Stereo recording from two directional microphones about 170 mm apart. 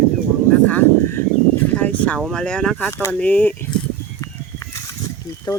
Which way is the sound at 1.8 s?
10° left (ahead or behind).